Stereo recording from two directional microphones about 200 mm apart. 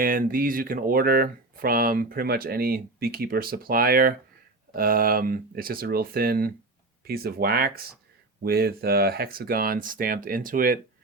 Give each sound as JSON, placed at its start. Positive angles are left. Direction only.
{"t": 0.0, "sound": "speech", "side_deg": -45}